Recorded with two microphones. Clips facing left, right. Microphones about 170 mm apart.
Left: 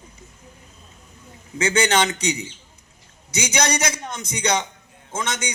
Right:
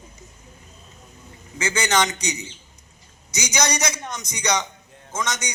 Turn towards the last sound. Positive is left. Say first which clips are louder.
# even
turn(degrees=30)  # may be behind; listen again after turning